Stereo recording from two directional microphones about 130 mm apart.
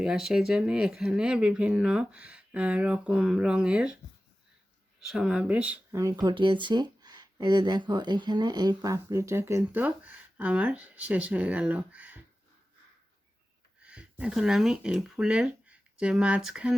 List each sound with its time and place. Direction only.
0.0 s speech: 5° right (ahead or behind)
4.9 s speech: 5° right (ahead or behind)
5.9 s speech: 25° right (ahead or behind)
13.8 s speech: 10° right (ahead or behind)